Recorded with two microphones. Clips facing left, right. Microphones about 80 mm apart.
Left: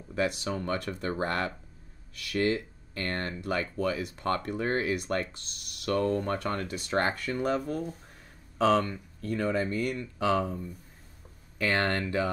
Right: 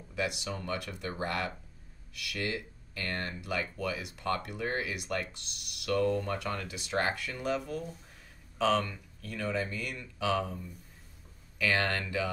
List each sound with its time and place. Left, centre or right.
0.1 s speech: left